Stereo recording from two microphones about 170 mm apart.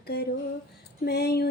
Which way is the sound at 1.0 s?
75° left (ahead or behind).